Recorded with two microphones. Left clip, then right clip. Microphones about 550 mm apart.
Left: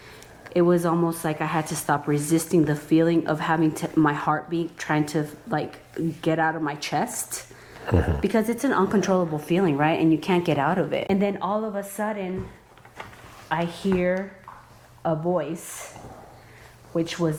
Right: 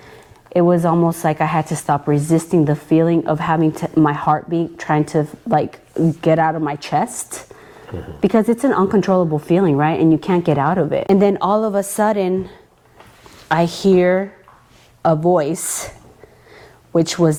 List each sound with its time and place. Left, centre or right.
0.5 s a woman's voice: right
7.9 s a woman's voice: left
8.2 s a woman's voice: right
11.2 s a woman's voice: right
13.5 s a woman's voice: right
16.9 s speech: right